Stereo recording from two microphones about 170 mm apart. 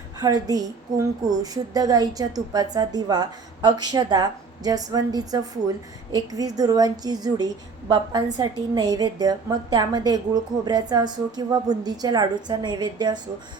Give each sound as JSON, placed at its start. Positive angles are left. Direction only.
{"t": 0.2, "sound": "a woman's voice", "side_deg": -20}